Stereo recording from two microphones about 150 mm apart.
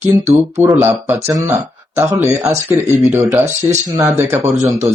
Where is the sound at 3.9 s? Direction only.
20° right (ahead or behind).